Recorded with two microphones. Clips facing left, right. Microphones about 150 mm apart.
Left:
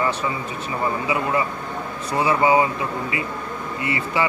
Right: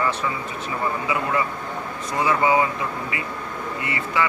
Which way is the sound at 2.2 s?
25° left (ahead or behind).